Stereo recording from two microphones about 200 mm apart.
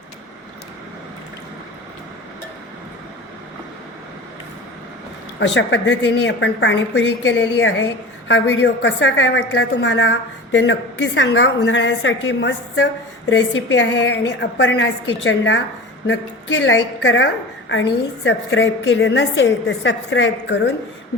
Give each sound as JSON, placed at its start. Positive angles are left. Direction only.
{"t": 5.4, "sound": "a woman's voice", "side_deg": 65}
{"t": 18.3, "sound": "a woman's voice", "side_deg": 60}